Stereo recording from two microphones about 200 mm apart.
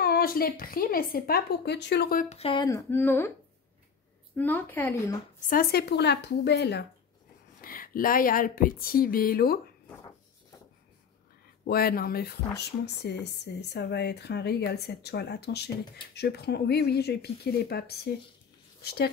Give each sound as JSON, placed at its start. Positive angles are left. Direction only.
{"t": 0.0, "sound": "a woman's voice", "side_deg": 50}
{"t": 2.2, "sound": "speech", "side_deg": 30}
{"t": 2.9, "sound": "a woman's voice", "side_deg": 10}
{"t": 4.4, "sound": "a woman's voice", "side_deg": 10}
{"t": 5.4, "sound": "speech", "side_deg": 45}
{"t": 7.6, "sound": "a woman's voice", "side_deg": 45}
{"t": 11.6, "sound": "a woman's voice", "side_deg": 50}